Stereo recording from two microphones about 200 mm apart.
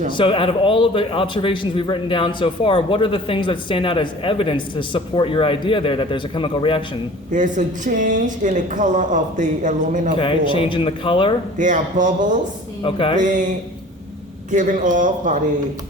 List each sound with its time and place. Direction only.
0.2 s a man's voice: 25° left (ahead or behind)
7.3 s speech: 40° right (ahead or behind)
10.2 s a man's voice: 25° left (ahead or behind)
11.5 s speech: 40° right (ahead or behind)
12.8 s a man's voice: 25° left (ahead or behind)
13.1 s speech: 40° right (ahead or behind)
14.5 s speech: 40° right (ahead or behind)